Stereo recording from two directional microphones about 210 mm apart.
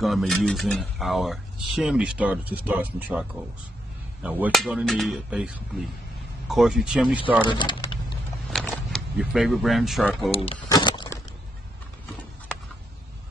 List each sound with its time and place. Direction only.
0.0 s speech: centre (ahead or behind)
7.4 s speech: 20° left (ahead or behind)
8.5 s speech: centre (ahead or behind)
10.3 s a sound: 25° left (ahead or behind)